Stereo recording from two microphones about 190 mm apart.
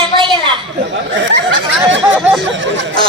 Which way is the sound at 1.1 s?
80° right.